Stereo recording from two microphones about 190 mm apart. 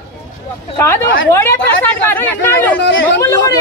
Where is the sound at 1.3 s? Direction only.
15° left (ahead or behind).